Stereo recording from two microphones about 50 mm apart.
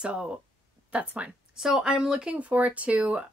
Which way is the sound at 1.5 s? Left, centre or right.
Centre.